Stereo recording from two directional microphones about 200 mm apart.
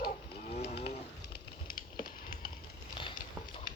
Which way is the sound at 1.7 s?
45° left (ahead or behind).